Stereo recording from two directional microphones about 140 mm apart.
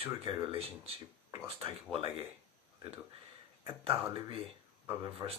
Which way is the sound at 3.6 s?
40° right (ahead or behind).